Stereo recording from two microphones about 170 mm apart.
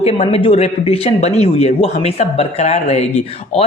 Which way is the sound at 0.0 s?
40° left (ahead or behind).